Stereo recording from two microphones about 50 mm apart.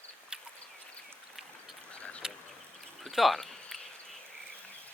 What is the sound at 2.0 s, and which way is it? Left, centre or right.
Duck, left.